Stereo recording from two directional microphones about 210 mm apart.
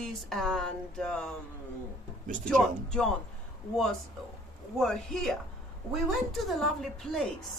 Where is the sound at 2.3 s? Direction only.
35° right (ahead or behind).